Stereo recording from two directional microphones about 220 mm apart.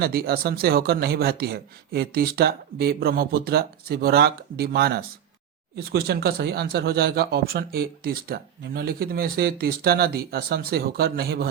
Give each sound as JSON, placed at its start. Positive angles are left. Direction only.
{"t": 0.0, "sound": "speech", "side_deg": -45}